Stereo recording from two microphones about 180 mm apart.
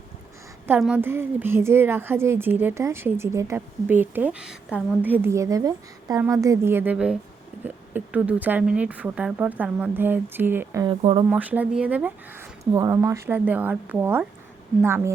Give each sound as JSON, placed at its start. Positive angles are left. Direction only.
{"t": 0.8, "sound": "speech", "side_deg": -5}
{"t": 11.0, "sound": "speech", "side_deg": -30}
{"t": 11.3, "sound": "speech", "side_deg": -10}